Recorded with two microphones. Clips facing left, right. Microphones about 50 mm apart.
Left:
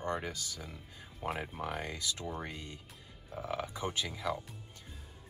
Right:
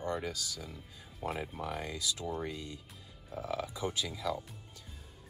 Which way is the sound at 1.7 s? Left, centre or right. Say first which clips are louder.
Right 1 dB; left.